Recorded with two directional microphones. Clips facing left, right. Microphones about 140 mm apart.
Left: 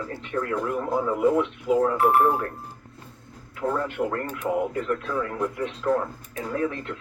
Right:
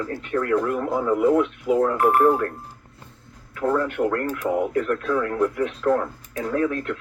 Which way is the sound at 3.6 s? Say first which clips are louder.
Right 4 dB; 60° right (ahead or behind).